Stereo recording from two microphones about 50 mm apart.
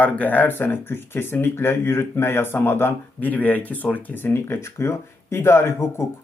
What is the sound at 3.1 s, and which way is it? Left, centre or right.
A man's voice, left.